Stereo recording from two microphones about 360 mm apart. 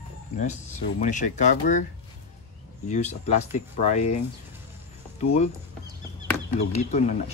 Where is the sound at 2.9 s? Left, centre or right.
Centre.